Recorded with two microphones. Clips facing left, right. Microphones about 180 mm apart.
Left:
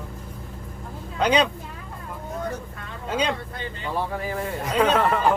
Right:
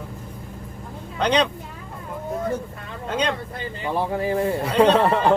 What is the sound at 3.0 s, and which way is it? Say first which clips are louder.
Speech: right 1 dB; 5° left (ahead or behind).